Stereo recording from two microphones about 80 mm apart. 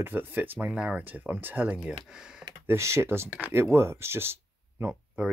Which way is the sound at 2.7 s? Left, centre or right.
Right.